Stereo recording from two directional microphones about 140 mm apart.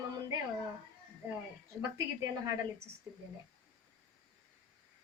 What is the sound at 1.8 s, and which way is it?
A woman's voice, 25° right (ahead or behind).